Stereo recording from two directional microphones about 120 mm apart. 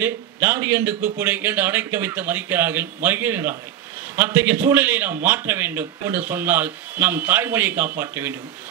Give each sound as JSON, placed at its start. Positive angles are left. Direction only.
{"t": 0.0, "sound": "a man's voice", "side_deg": -20}